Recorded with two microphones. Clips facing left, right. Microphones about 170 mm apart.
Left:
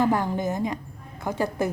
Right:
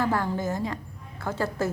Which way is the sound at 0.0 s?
20° left (ahead or behind).